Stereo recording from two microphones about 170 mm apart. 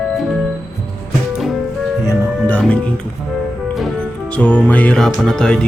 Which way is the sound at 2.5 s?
10° left (ahead or behind).